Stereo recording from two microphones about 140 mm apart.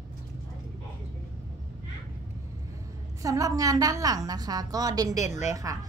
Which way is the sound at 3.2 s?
25° right (ahead or behind).